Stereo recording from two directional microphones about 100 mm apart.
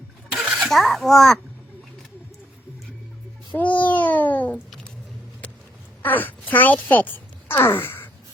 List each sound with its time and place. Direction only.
0.4 s a sound: 15° right (ahead or behind)
0.7 s a child's voice: centre (ahead or behind)
3.5 s a child's voice: 15° left (ahead or behind)
5.4 s duck: 15° left (ahead or behind)
6.0 s speech: 20° left (ahead or behind)